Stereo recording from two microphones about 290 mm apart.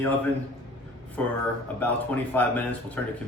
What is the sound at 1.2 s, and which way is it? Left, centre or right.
Speech, centre.